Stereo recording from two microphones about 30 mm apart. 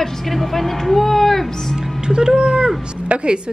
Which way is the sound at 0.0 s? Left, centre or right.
Centre.